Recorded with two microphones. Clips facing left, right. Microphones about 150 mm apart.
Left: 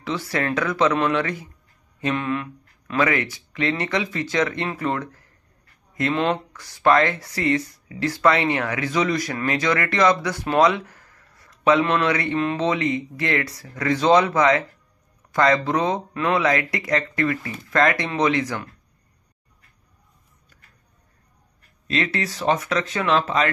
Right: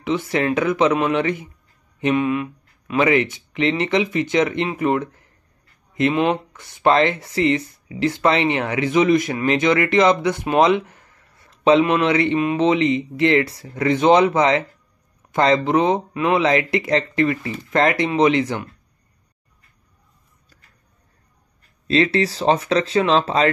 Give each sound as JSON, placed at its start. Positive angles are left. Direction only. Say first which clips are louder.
{"t": 0.0, "sound": "speech", "louder": "right 5 dB", "side_deg": -20}
{"t": 3.0, "sound": "speech", "louder": "right 4 dB", "side_deg": -20}
{"t": 11.8, "sound": "speech", "louder": "right 4 dB", "side_deg": -15}
{"t": 16.4, "sound": "speech", "louder": "right 4 dB", "side_deg": -25}
{"t": 21.8, "sound": "speech", "louder": "right 7 dB", "side_deg": -30}